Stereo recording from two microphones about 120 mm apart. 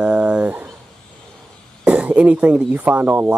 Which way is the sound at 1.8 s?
10° right (ahead or behind).